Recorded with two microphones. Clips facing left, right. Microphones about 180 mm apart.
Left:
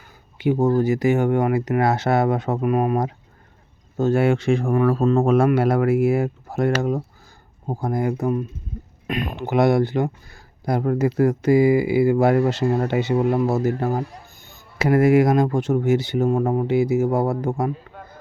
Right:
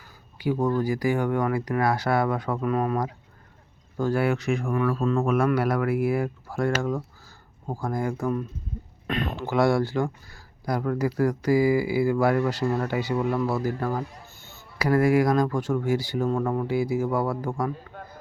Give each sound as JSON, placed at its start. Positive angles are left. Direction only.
{"t": 0.3, "sound": "speech", "side_deg": 25}